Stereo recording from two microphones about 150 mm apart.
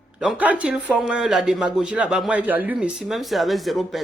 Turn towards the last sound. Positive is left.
turn(degrees=0)  # may be behind; listen again after turning